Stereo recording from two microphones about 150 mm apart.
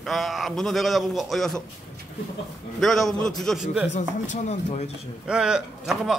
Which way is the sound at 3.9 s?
55° left (ahead or behind).